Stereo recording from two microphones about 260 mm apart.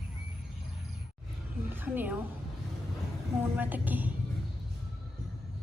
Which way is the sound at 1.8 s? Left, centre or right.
Centre.